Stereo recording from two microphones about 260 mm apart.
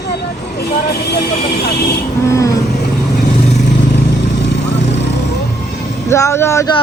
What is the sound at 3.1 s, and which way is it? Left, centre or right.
Vehicle, left.